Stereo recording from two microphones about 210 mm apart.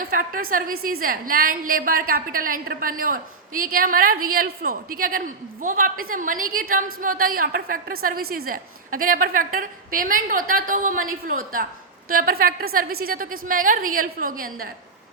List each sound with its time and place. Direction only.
0.0 s a woman's voice: 40° right (ahead or behind)